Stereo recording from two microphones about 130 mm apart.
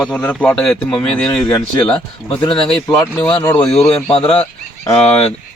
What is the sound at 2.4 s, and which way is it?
Speech, 35° left (ahead or behind).